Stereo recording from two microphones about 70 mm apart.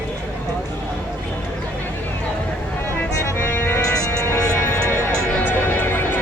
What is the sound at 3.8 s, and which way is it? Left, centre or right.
Music, left.